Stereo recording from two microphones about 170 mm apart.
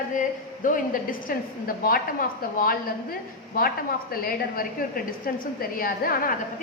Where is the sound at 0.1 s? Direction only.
50° left (ahead or behind).